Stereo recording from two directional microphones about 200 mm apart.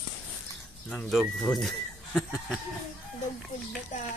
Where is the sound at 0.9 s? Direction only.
Centre (ahead or behind).